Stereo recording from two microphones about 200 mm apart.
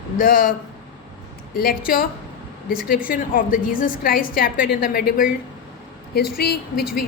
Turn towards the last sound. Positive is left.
turn(degrees=50)  # may be behind; listen again after turning